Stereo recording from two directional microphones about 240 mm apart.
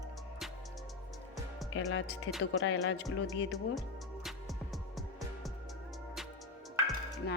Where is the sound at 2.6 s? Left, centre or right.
Left.